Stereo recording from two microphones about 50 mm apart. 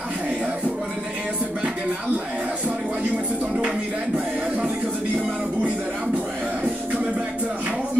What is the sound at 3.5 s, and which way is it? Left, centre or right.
Music, right.